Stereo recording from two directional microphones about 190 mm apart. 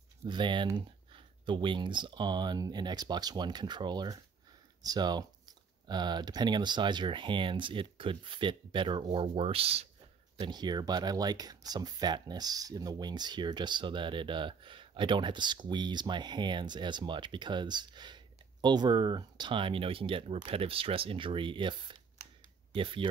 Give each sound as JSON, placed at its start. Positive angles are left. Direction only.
{"t": 0.2, "sound": "speech", "side_deg": -25}